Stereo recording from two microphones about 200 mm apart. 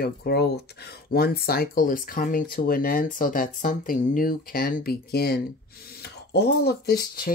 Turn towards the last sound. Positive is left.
turn(degrees=50)  # may be behind; listen again after turning